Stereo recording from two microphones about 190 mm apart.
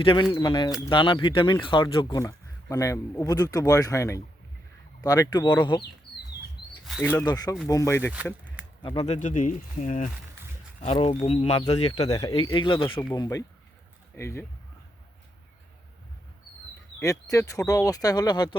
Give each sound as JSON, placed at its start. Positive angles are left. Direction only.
{"t": 0.0, "sound": "speech", "side_deg": 25}
{"t": 7.3, "sound": "speech", "side_deg": 20}
{"t": 8.1, "sound": "a sound", "side_deg": -5}
{"t": 8.8, "sound": "speech", "side_deg": 30}
{"t": 12.1, "sound": "speech", "side_deg": 25}
{"t": 17.0, "sound": "speech", "side_deg": 15}